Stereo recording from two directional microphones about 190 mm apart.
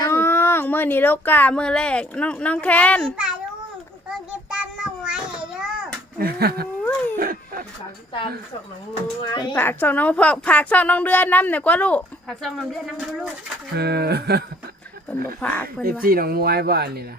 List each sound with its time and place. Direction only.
0.0 s speech: 15° left (ahead or behind)
3.0 s a child's voice: 5° right (ahead or behind)
4.3 s a sound: 5° right (ahead or behind)
6.1 s speech: 55° right (ahead or behind)
7.2 s a sound: 50° right (ahead or behind)
9.2 s speech: 25° left (ahead or behind)
9.6 s a woman's voice: 10° left (ahead or behind)
13.7 s speech: 60° right (ahead or behind)
15.4 s a woman's voice: 10° left (ahead or behind)
15.8 s speech: 50° right (ahead or behind)